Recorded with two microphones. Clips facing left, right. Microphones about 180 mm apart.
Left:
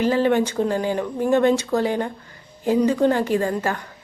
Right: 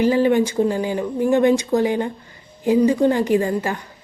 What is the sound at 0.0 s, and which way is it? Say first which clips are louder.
A woman's voice: right 2 dB; 10° right (ahead or behind).